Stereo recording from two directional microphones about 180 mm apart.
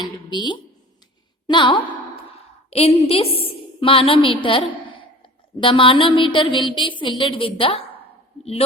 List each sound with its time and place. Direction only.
0.0 s speech: 25° left (ahead or behind)
2.6 s a woman's voice: 35° left (ahead or behind)